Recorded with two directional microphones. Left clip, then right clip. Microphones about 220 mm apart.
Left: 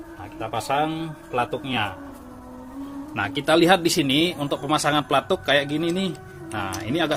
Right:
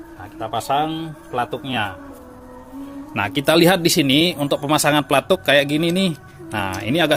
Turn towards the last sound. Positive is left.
turn(degrees=-40)  # may be behind; listen again after turning